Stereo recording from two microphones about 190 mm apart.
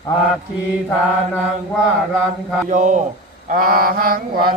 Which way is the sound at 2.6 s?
40° right (ahead or behind).